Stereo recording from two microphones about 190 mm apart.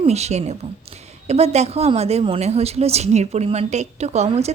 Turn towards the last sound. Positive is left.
turn(degrees=-35)  # may be behind; listen again after turning